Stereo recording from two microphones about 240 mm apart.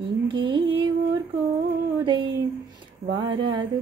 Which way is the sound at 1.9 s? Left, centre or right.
Centre.